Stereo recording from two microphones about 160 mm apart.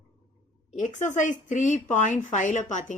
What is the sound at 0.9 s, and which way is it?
A woman's voice, 50° left (ahead or behind).